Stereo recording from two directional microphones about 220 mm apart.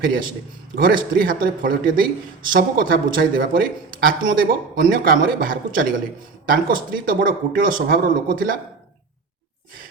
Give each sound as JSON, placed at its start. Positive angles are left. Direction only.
{"t": 0.0, "sound": "a man's voice", "side_deg": -40}